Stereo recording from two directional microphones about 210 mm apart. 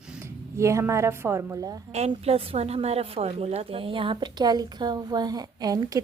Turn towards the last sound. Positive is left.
turn(degrees=-15)  # may be behind; listen again after turning